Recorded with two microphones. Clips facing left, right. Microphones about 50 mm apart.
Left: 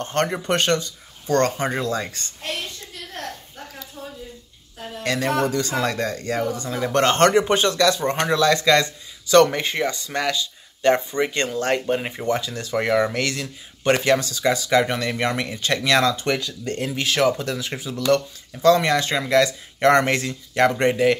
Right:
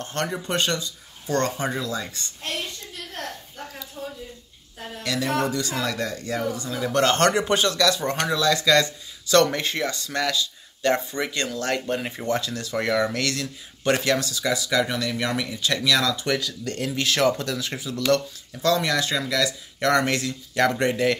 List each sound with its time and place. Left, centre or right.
0.0 s speech: left
5.0 s a sound: left
5.4 s speech: left
9.3 s speech: left
14.2 s speech: left; by 18.7 s centre
18.9 s speech: left